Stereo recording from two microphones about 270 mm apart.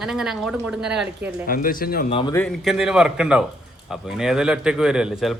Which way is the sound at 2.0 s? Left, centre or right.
Centre.